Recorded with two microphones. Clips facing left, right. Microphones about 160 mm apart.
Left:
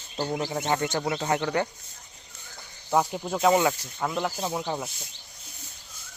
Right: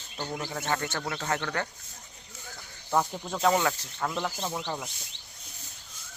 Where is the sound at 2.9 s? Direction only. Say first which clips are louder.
Left 3 dB; 10° left (ahead or behind).